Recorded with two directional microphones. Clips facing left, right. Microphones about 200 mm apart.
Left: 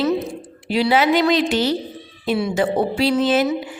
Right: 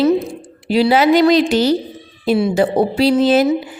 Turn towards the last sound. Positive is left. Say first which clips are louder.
# right 5 dB
turn(degrees=-35)  # may be behind; listen again after turning